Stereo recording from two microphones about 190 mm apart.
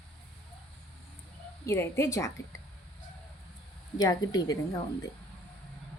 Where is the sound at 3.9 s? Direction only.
20° left (ahead or behind).